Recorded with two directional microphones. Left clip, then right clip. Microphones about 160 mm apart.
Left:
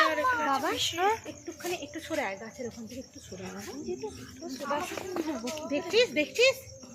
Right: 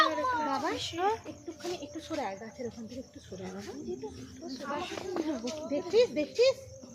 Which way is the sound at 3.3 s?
15° left (ahead or behind).